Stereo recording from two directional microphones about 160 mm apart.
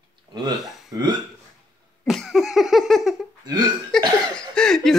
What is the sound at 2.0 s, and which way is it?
Cough, centre (ahead or behind).